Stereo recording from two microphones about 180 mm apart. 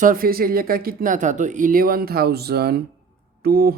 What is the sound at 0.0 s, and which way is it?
Speech, 50° right (ahead or behind).